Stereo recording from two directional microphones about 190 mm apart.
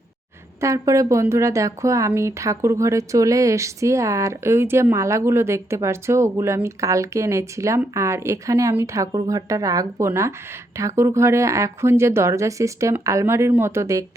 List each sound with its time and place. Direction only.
0.6 s speech: 15° right (ahead or behind)